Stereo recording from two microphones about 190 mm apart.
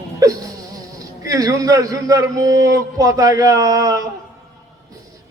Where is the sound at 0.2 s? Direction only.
20° right (ahead or behind).